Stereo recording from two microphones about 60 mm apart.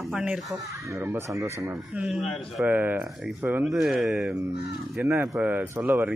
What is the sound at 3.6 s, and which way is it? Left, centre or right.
Speech, centre.